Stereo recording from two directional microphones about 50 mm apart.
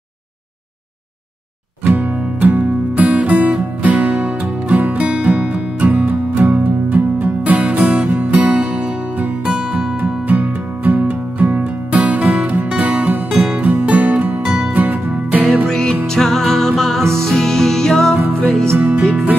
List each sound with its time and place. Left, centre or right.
1.9 s music: right
8.1 s music: right
9.5 s music: centre
9.9 s music: right
14.4 s music: centre
14.7 s music: right
15.7 s music: centre
18.1 s music: right
18.8 s music: right